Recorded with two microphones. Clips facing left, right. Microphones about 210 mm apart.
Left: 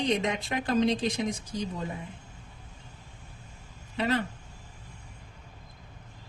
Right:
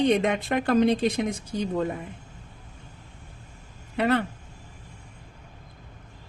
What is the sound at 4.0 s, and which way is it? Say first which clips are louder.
Speech: right 5 dB; 60° right (ahead or behind).